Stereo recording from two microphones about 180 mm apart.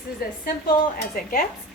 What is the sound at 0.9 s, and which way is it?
Speech, 50° left (ahead or behind).